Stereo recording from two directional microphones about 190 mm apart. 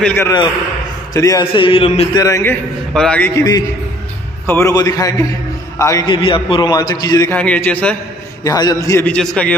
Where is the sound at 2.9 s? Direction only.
5° left (ahead or behind).